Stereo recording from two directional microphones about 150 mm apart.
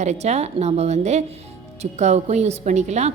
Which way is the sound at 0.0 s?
50° right (ahead or behind).